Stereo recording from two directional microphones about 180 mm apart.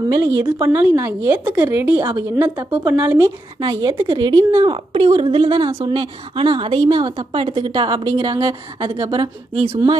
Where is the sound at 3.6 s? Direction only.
25° right (ahead or behind).